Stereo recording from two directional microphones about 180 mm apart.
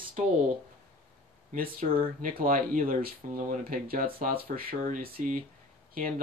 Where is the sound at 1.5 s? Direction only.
45° right (ahead or behind).